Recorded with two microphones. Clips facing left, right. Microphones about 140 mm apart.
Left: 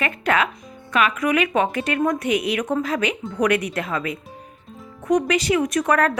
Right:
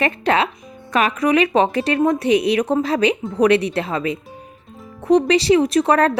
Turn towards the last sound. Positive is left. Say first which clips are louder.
# right 4 dB
turn(degrees=-30)  # may be behind; listen again after turning